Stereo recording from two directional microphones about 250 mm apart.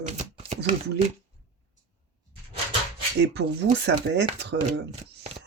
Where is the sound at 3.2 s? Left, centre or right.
Right.